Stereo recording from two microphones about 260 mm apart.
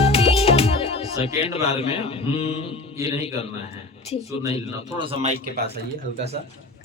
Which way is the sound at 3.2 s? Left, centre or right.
Left.